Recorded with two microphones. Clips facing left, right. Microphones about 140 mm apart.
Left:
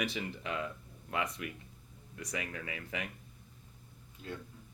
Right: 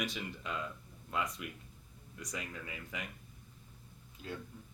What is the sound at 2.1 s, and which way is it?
Speech, 75° left (ahead or behind).